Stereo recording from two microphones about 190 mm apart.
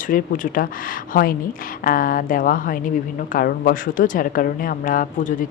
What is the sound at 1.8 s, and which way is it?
A woman's voice, 45° left (ahead or behind).